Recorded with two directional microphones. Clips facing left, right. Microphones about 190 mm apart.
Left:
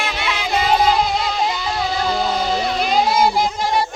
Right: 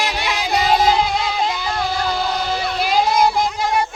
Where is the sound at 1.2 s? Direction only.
Centre (ahead or behind).